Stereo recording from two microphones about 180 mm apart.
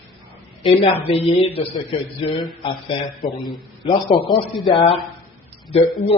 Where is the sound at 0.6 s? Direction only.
30° left (ahead or behind).